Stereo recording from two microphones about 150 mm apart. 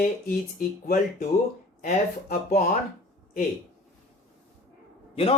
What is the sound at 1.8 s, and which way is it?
Speech, 55° left (ahead or behind).